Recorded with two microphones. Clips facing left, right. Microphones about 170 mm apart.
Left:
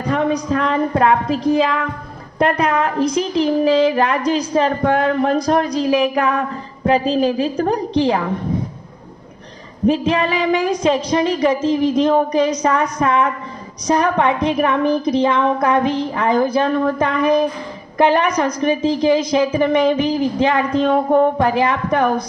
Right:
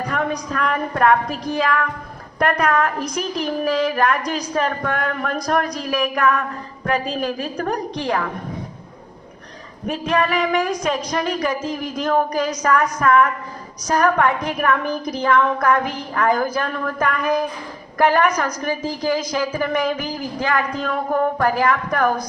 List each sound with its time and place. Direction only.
0.1 s a woman's voice: 25° left (ahead or behind)
9.8 s a woman's voice: 25° left (ahead or behind)